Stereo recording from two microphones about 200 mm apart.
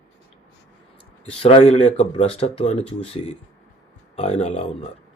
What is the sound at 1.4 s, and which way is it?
Speech, 30° left (ahead or behind).